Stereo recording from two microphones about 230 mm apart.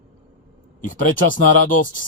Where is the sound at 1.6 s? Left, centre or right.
Left.